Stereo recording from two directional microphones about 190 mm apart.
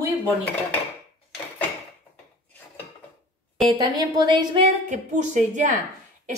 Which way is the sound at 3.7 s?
25° right (ahead or behind).